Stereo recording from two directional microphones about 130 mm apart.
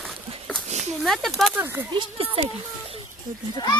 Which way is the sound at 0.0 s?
Centre (ahead or behind).